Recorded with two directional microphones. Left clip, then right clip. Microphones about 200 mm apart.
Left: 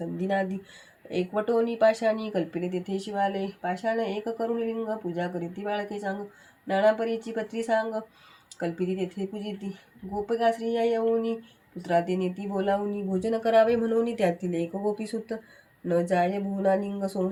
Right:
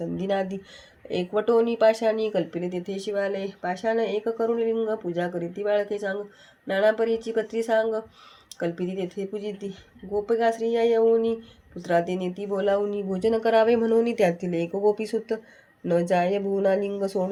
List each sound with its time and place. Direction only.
0.2 s speech: 35° right (ahead or behind)
10.2 s speech: 35° right (ahead or behind)